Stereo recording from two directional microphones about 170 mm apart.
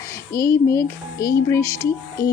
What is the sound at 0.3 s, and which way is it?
A woman's voice, 15° left (ahead or behind).